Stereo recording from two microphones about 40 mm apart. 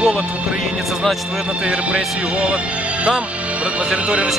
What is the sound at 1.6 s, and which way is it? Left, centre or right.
Music, right.